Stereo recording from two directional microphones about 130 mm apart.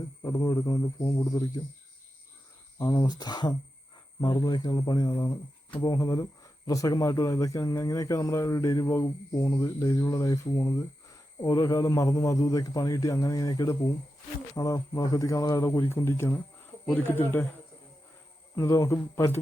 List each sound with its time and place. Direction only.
0.2 s speech: 30° left (ahead or behind)
2.7 s speech: 35° left (ahead or behind); by 17.4 s 15° left (ahead or behind)
18.5 s speech: 25° left (ahead or behind)